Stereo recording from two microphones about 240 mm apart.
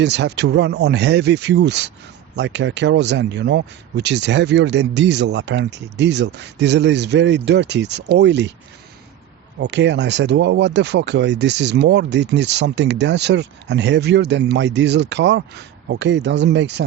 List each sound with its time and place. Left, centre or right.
0.0 s speech: right
9.6 s speech: right